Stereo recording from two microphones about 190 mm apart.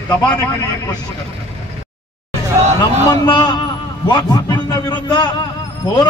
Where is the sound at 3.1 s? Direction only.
25° left (ahead or behind).